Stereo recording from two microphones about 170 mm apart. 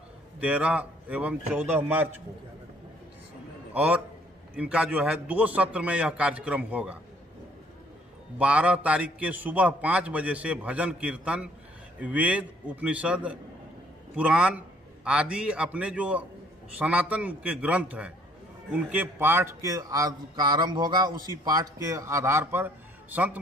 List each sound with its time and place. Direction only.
0.4 s a man's voice: 10° right (ahead or behind)
3.7 s a man's voice: 10° right (ahead or behind)
8.4 s a man's voice: 5° right (ahead or behind)